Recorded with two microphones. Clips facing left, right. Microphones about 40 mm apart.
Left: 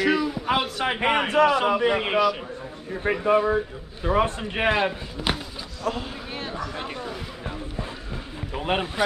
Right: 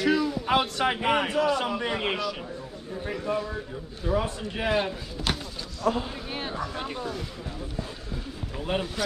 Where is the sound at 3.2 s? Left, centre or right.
Left.